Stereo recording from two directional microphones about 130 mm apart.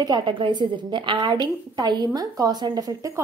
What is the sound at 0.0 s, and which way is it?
A woman's voice, 35° right (ahead or behind).